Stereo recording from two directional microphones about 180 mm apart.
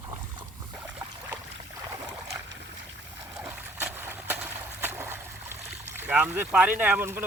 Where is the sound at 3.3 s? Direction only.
10° right (ahead or behind).